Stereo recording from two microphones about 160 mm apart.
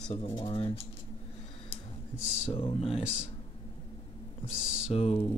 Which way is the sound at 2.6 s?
35° left (ahead or behind).